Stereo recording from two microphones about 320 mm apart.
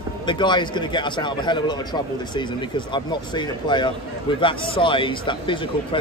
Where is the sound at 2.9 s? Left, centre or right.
Centre.